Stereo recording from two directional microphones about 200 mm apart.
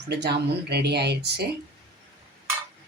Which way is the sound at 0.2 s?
55° right (ahead or behind).